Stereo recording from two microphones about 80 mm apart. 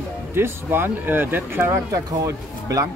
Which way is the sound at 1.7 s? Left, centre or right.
Right.